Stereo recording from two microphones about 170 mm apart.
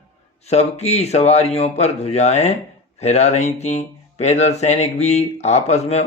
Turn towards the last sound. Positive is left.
turn(degrees=40)  # may be behind; listen again after turning